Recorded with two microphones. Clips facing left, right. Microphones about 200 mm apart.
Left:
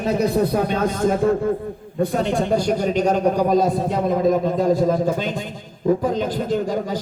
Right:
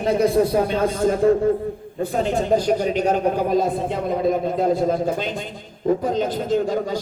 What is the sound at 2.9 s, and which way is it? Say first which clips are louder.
A man's voice: left 1 dB; 40° left (ahead or behind).